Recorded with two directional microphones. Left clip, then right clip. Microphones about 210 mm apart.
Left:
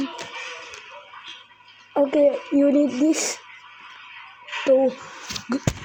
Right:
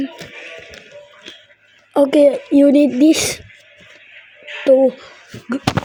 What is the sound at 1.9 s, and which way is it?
Speech, 35° right (ahead or behind).